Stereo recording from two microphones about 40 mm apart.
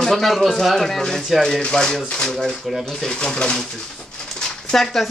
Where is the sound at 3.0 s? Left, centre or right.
Centre.